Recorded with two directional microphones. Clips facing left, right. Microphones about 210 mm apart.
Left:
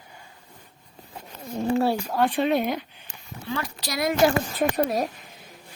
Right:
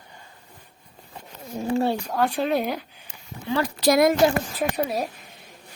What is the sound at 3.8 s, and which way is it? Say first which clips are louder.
Speech: right 10 dB; 50° right (ahead or behind).